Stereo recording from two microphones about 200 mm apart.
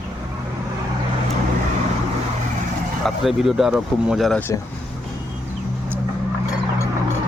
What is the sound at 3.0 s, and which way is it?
Speech, centre (ahead or behind).